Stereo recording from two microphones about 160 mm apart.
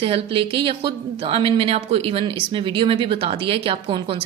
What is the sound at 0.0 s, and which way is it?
Speech, 35° right (ahead or behind).